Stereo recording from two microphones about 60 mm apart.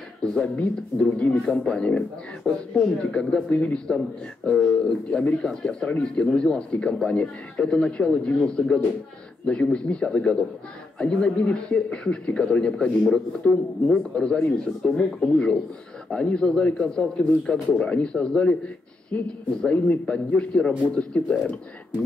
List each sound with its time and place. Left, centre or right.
0.2 s a man's voice: centre
1.5 s speech: centre
3.4 s a man's voice: left
4.5 s a man's voice: centre
14.9 s speech: centre
15.3 s a man's voice: centre